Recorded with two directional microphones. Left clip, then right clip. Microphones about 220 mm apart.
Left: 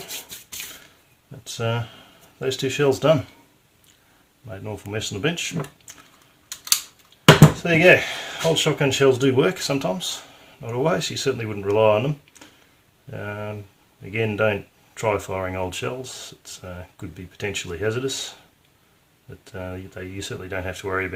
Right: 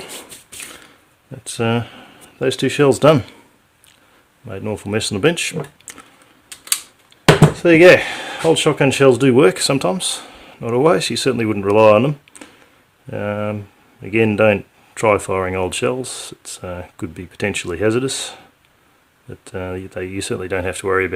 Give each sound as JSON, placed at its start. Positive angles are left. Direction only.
{"t": 1.5, "sound": "speech", "side_deg": -50}
{"t": 4.4, "sound": "speech", "side_deg": -40}
{"t": 7.6, "sound": "speech", "side_deg": -50}
{"t": 19.5, "sound": "speech", "side_deg": -50}